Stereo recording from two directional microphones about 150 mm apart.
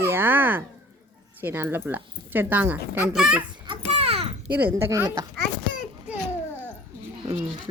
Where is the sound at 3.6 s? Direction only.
35° right (ahead or behind).